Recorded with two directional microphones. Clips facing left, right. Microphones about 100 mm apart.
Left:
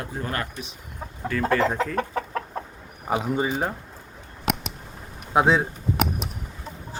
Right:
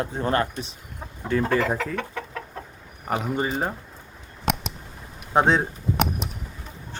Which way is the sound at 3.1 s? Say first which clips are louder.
Left 1 dB; 10° left (ahead or behind).